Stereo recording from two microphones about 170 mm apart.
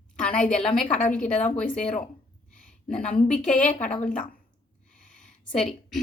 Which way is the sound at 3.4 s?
5° left (ahead or behind).